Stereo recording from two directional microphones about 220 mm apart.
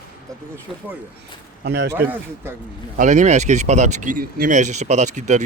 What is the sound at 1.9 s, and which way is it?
Speech, 10° right (ahead or behind).